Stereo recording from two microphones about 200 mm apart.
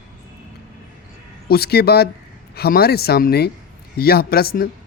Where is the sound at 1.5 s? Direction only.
50° left (ahead or behind).